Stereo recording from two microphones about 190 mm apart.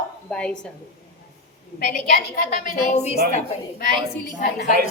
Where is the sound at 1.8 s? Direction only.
55° left (ahead or behind).